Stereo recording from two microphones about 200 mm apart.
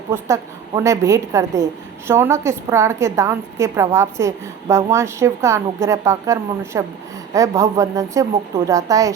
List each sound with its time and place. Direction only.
0.1 s a woman's voice: 15° right (ahead or behind)